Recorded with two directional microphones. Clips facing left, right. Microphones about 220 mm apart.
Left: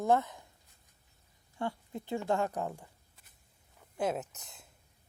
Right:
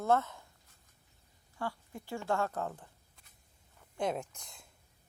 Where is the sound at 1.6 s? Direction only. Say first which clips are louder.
Left 3 dB; 20° left (ahead or behind).